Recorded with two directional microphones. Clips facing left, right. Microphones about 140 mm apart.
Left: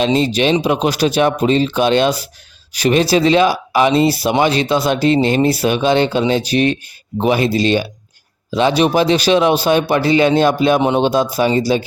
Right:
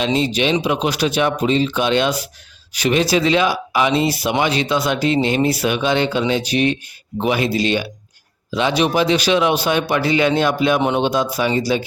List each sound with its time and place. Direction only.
0.0 s speech: 35° left (ahead or behind)